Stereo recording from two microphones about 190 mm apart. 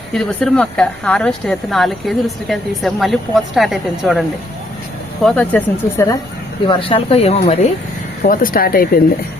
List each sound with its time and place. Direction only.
0.1 s speech: 5° left (ahead or behind)
6.7 s speech: 30° left (ahead or behind)
8.2 s speech: 45° left (ahead or behind)